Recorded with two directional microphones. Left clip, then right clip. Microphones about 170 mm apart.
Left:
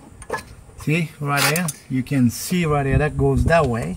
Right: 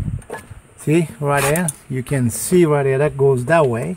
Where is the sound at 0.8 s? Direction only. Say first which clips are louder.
Right 6 dB; 55° right (ahead or behind).